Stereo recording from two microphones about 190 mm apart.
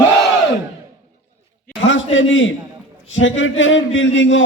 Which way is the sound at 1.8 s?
85° left.